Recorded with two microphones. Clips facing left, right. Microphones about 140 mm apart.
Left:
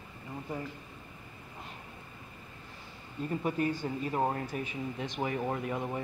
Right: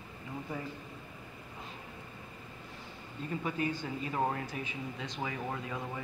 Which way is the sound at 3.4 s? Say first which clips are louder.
Left 3 dB; 45° left (ahead or behind).